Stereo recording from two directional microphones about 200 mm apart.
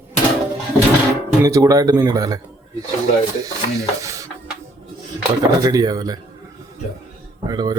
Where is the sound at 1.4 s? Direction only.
15° right (ahead or behind).